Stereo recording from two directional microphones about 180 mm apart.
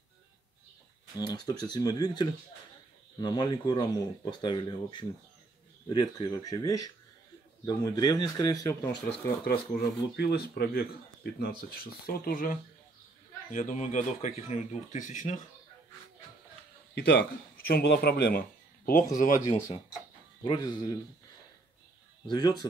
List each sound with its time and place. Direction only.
1.1 s speech: 25° left (ahead or behind)
9.4 s speech: 55° left (ahead or behind)
16.9 s speech: 60° left (ahead or behind)
19.1 s speech: 45° left (ahead or behind)
20.4 s speech: 25° left (ahead or behind)
22.3 s speech: 25° left (ahead or behind)